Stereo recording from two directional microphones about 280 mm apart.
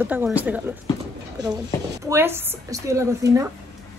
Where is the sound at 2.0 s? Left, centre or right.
Centre.